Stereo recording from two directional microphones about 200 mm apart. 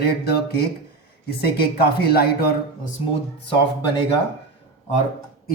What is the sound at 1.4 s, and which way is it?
Speech, 50° left (ahead or behind).